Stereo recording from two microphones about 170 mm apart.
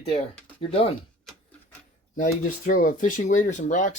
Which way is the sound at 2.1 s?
50° left (ahead or behind).